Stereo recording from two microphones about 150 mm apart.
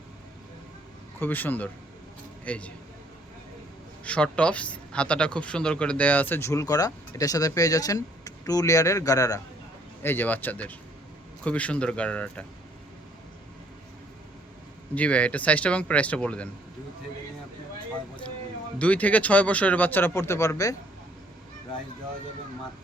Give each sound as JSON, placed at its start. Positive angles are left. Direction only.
{"t": 1.2, "sound": "a man's voice", "side_deg": 10}
{"t": 4.0, "sound": "speech", "side_deg": 10}
{"t": 10.0, "sound": "a man's voice", "side_deg": 15}
{"t": 14.9, "sound": "a man's voice", "side_deg": 10}
{"t": 18.8, "sound": "a man's voice", "side_deg": 10}